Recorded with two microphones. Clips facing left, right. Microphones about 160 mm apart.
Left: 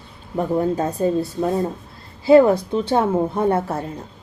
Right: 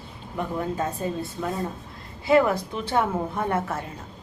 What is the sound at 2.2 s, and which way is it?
A woman's voice, 30° left (ahead or behind).